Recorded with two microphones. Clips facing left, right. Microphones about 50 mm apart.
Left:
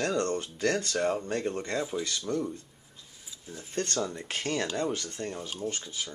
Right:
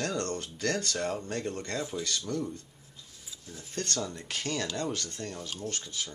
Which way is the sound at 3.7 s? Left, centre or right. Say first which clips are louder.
Left 3 dB; left.